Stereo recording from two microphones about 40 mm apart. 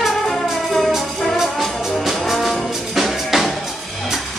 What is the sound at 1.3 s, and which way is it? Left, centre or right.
Music, centre.